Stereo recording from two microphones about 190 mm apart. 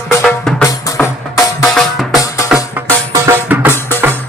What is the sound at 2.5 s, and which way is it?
Music, 5° right (ahead or behind).